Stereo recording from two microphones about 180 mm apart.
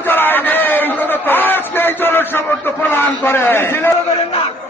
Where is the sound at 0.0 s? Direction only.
10° left (ahead or behind).